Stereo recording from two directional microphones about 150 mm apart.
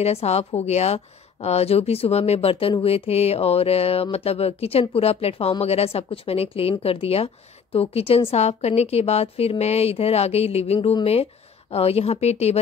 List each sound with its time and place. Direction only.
0.0 s a woman's voice: 45° left (ahead or behind)